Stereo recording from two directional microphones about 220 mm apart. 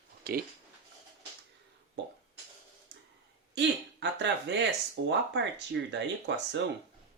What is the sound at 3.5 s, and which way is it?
A man's voice, 50° right (ahead or behind).